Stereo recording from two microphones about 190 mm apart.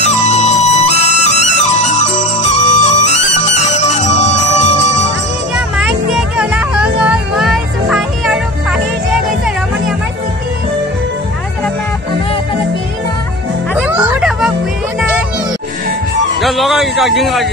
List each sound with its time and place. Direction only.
0.0 s music: 35° left (ahead or behind)
5.8 s music: 5° right (ahead or behind)
13.7 s music: 5° right (ahead or behind)
16.3 s a sound: centre (ahead or behind)